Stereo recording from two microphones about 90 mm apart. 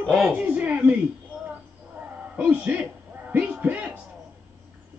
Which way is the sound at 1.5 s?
15° right (ahead or behind).